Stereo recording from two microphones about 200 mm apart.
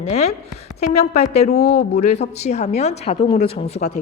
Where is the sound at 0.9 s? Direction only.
35° left (ahead or behind).